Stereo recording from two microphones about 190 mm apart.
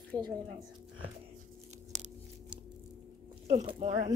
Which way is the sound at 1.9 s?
40° right (ahead or behind).